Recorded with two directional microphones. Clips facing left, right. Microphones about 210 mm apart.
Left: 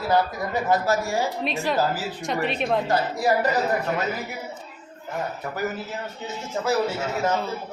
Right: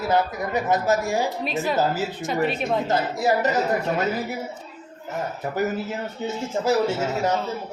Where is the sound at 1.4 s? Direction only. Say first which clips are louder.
Right 1 dB; centre (ahead or behind).